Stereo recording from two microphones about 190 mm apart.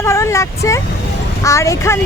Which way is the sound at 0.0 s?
15° left (ahead or behind).